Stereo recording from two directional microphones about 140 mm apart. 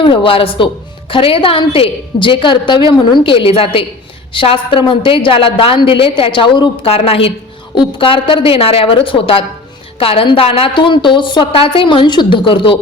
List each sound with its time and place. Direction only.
0.0 s a woman's voice: 40° left (ahead or behind)